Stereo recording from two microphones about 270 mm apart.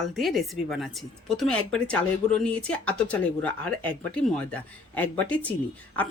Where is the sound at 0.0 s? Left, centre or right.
Centre.